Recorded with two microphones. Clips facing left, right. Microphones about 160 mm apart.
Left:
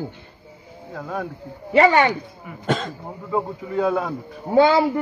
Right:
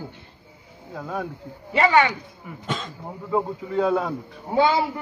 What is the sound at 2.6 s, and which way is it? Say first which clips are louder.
Speech: left 7 dB; 65° left (ahead or behind).